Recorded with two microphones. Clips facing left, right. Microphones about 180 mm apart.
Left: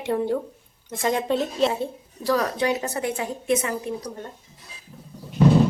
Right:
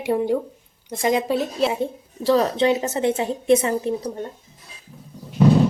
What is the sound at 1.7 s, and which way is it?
A woman's voice, 20° right (ahead or behind).